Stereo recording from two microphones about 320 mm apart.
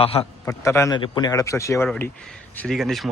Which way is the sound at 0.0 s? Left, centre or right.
Centre.